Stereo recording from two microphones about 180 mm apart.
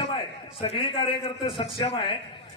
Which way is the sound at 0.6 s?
30° left (ahead or behind).